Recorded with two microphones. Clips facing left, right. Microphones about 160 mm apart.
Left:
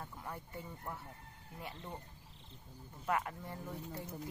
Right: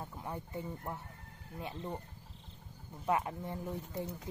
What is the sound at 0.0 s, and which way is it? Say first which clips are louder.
Speech: right 4 dB; 20° right (ahead or behind).